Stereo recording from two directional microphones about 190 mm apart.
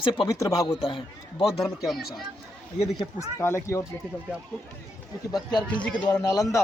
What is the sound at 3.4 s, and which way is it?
Speech, 15° left (ahead or behind).